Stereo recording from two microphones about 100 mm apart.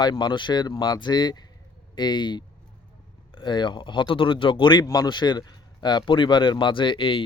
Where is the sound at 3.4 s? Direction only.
50° left (ahead or behind).